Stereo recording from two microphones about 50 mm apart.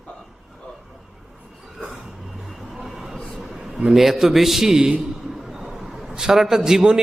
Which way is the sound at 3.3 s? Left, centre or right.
Centre.